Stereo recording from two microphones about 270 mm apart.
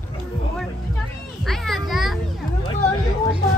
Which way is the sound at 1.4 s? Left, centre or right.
Centre.